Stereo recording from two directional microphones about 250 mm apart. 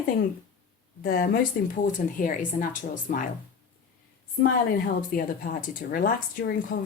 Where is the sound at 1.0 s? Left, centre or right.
Left.